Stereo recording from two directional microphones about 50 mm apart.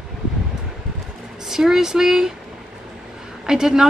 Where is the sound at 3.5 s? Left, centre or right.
Centre.